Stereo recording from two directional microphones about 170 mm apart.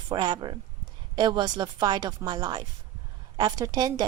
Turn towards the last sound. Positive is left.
turn(degrees=-20)  # may be behind; listen again after turning